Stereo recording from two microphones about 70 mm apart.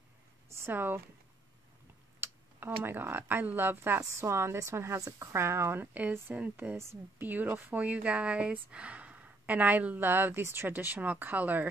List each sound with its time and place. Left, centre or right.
0.5 s speech: right
2.1 s speech: right
4.0 s a woman's voice: right
6.5 s speech: right
6.8 s a woman's voice: right
7.2 s speech: right